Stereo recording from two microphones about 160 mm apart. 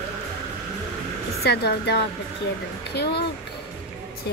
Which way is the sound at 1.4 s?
90° left.